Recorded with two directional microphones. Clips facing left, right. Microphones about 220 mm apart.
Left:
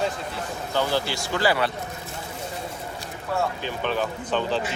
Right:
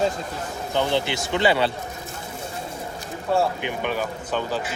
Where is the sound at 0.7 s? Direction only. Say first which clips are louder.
Right 2 dB; 20° right (ahead or behind).